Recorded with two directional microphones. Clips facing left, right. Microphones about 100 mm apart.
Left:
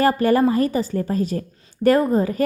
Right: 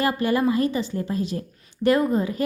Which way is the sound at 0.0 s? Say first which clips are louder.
Left 5 dB; 45° left (ahead or behind).